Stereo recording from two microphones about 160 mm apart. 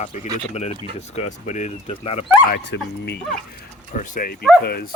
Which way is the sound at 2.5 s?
90° left.